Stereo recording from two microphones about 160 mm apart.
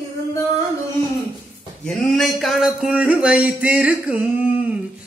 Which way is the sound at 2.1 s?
Centre (ahead or behind).